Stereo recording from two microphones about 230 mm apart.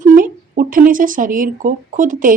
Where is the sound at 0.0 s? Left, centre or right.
Right.